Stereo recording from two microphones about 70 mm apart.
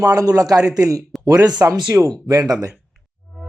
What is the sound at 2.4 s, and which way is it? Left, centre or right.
Speech, right.